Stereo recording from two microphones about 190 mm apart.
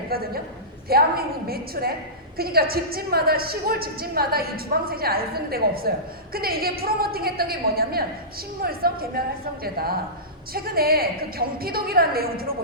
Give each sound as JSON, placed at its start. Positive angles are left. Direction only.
{"t": 0.1, "sound": "a woman's voice", "side_deg": -55}